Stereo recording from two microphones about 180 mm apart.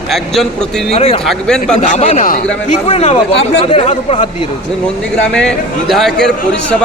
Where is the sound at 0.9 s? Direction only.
35° left (ahead or behind).